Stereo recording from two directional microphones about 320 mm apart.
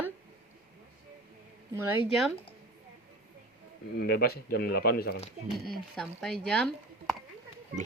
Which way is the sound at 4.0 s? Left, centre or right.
Left.